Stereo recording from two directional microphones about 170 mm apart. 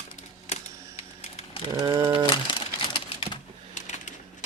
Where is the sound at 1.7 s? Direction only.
25° right (ahead or behind).